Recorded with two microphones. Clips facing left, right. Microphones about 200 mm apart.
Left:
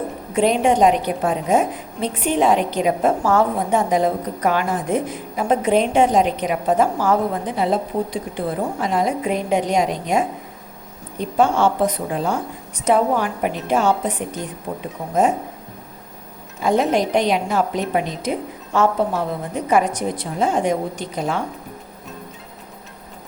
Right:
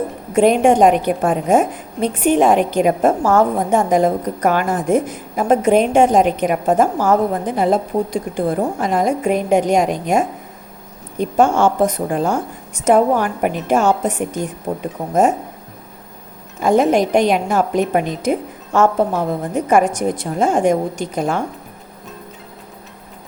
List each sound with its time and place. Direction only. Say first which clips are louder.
0.3 s a woman's voice: right 4 dB; 50° right (ahead or behind)
16.6 s a woman's voice: right 4 dB; 50° right (ahead or behind)